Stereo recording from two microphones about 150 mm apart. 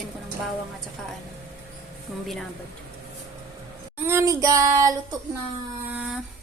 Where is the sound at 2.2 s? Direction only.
Centre (ahead or behind).